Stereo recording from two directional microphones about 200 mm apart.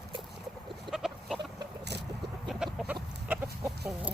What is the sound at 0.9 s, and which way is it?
Chicken, centre (ahead or behind).